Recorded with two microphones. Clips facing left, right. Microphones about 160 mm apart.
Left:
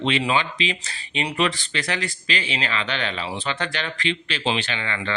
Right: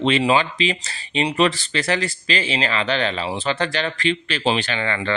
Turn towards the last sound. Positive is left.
turn(degrees=-40)  # may be behind; listen again after turning